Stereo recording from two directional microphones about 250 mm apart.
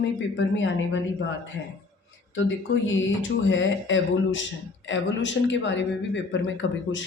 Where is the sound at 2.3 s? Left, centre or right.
Left.